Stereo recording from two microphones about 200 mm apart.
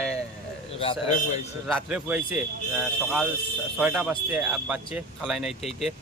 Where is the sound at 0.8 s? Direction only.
30° left (ahead or behind).